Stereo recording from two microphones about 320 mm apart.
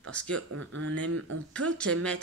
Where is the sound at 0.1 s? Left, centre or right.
Centre.